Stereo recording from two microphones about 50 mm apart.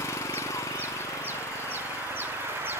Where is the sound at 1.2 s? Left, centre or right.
Right.